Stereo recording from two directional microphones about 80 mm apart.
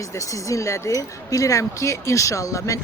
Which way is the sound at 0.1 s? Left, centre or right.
Left.